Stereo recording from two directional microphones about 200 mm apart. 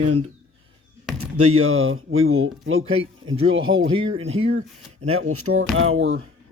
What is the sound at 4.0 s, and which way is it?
Speech, 25° right (ahead or behind).